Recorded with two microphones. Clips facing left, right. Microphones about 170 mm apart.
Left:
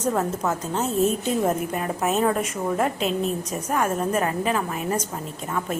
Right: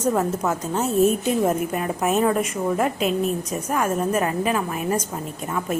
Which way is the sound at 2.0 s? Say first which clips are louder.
Right 2 dB; 10° right (ahead or behind).